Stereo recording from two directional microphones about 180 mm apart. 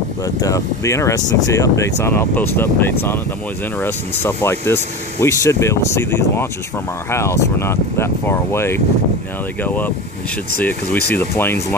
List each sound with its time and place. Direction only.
0.2 s speech: 20° left (ahead or behind)